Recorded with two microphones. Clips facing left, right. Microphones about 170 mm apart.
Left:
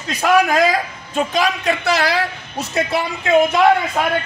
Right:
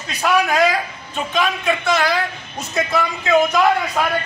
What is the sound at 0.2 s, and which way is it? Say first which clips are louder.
A man's voice: left 2 dB; 45° left (ahead or behind).